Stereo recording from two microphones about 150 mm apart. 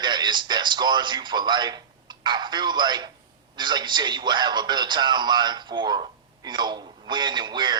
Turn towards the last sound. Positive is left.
turn(degrees=-30)  # may be behind; listen again after turning